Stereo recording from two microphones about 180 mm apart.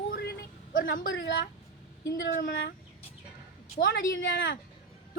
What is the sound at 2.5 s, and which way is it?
Speech, 80° left.